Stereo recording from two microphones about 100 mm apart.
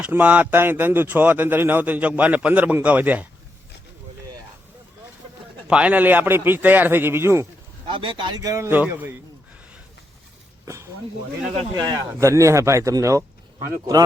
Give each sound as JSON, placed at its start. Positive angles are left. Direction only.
{"t": 0.0, "sound": "speech", "side_deg": -15}
{"t": 5.6, "sound": "a man's voice", "side_deg": -10}
{"t": 7.9, "sound": "speech", "side_deg": -55}
{"t": 8.7, "sound": "speech", "side_deg": -15}
{"t": 11.7, "sound": "speech", "side_deg": -40}